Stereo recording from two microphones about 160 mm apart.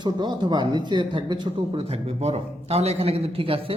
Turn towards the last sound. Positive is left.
turn(degrees=-35)  # may be behind; listen again after turning